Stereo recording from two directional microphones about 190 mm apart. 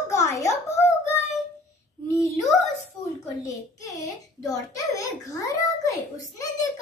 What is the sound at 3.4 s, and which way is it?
A child's voice, 15° left (ahead or behind).